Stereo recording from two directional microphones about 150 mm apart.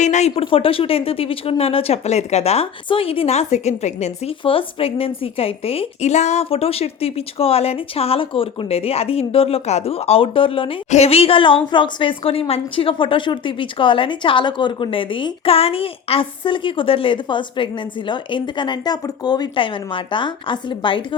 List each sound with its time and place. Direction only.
0.0 s speech: 50° left (ahead or behind)
10.8 s speech: 45° left (ahead or behind)